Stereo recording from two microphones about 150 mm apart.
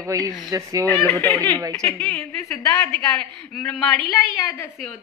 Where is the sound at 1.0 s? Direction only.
20° left (ahead or behind).